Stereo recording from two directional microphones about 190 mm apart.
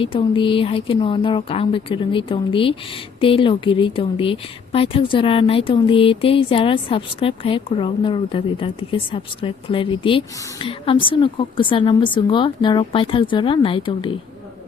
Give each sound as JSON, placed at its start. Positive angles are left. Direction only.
{"t": 0.0, "sound": "speech", "side_deg": 25}